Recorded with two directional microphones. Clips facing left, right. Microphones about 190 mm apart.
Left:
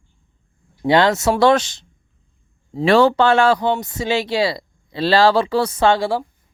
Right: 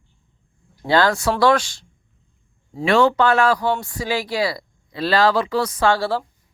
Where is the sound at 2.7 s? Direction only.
35° left (ahead or behind); by 6.2 s 15° left (ahead or behind).